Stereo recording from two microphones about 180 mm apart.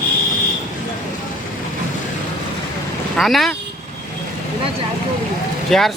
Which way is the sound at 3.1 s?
Centre (ahead or behind).